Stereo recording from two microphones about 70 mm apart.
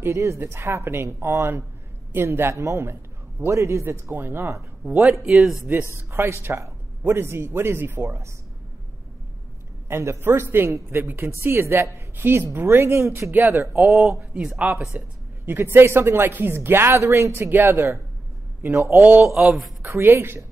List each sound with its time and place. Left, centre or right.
0.0 s speech: right
5.2 s speech: centre
5.9 s speech: right
9.8 s speech: right
13.8 s speech: centre
14.9 s speech: right
19.2 s speech: centre
19.9 s speech: right